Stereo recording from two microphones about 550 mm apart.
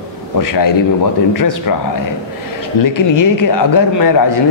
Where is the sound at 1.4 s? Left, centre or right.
Left.